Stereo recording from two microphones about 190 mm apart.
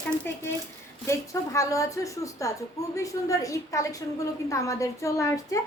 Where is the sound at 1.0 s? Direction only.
15° left (ahead or behind).